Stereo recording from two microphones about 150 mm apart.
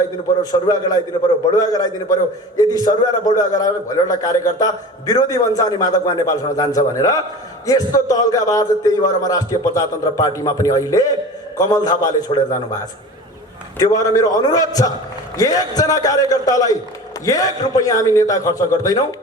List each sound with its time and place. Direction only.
0.5 s a man's voice: 25° left (ahead or behind)
13.7 s a man's voice: 25° left (ahead or behind)